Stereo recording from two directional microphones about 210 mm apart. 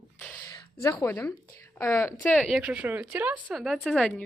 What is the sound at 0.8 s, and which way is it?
Speech, 15° left (ahead or behind).